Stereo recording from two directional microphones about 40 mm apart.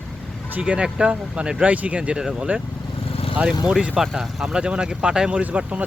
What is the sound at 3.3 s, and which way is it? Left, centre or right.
Speech, right.